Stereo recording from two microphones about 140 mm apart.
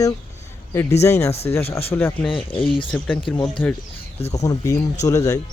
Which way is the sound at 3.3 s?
10° left (ahead or behind).